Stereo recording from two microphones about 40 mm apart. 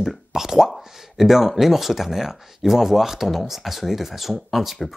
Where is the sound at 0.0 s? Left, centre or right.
Centre.